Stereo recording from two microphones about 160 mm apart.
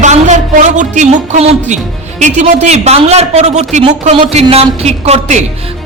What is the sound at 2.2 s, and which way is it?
A man's voice, 45° right (ahead or behind).